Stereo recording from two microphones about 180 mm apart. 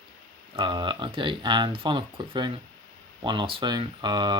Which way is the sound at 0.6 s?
25° right (ahead or behind).